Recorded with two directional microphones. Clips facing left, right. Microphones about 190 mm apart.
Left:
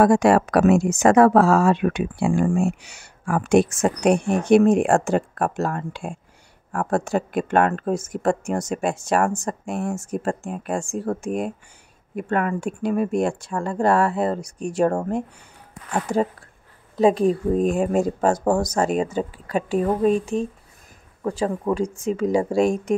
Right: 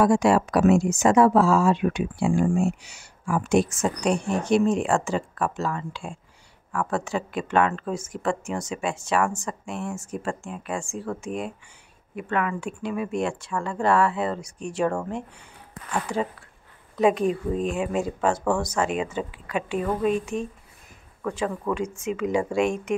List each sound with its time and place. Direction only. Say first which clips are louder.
0.0 s speech: left 3 dB; 60° left (ahead or behind); by 16.3 s 40° left (ahead or behind)
16.9 s speech: left 4 dB; 30° left (ahead or behind)